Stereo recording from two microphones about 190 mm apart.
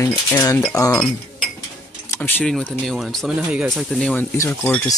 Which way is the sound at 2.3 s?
5° left (ahead or behind).